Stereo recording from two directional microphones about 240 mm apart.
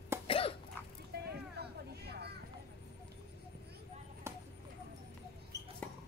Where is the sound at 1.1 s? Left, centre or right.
Right.